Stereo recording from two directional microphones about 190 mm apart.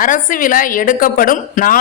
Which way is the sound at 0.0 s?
45° left (ahead or behind).